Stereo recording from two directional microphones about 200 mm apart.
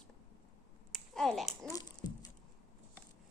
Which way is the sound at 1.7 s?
20° left (ahead or behind).